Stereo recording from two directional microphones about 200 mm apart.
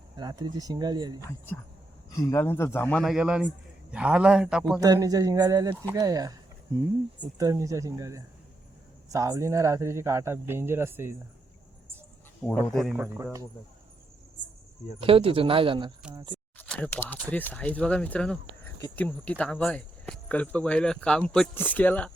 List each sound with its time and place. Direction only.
0.2 s speech: 20° right (ahead or behind)
2.0 s speech: 15° left (ahead or behind); by 4.8 s 5° right (ahead or behind)
4.8 s speech: 15° right (ahead or behind)
12.7 s speech: centre (ahead or behind)
15.0 s speech: 25° right (ahead or behind)
16.6 s speech: 5° left (ahead or behind)